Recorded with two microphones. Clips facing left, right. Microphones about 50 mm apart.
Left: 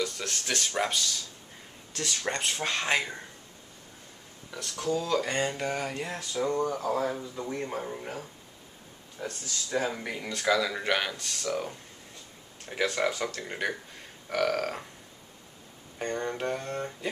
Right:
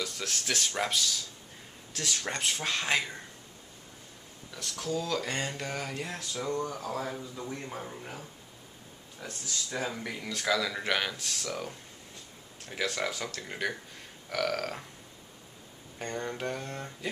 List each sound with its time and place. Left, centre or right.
0.0 s speech: centre
4.6 s speech: centre
9.2 s speech: centre
16.0 s speech: centre